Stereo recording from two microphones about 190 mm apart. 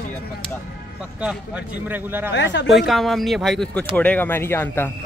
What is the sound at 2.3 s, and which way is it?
Speech, 70° left (ahead or behind).